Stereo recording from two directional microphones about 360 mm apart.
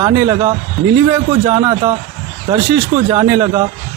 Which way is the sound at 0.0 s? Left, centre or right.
Centre.